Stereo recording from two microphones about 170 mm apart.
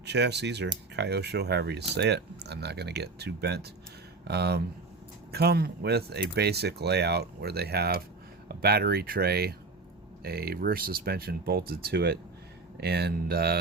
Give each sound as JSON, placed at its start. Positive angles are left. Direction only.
{"t": 0.0, "sound": "speech", "side_deg": -85}